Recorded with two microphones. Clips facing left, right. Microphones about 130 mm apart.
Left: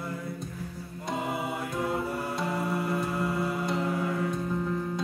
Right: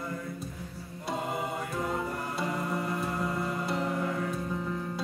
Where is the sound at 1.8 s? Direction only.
5° left (ahead or behind).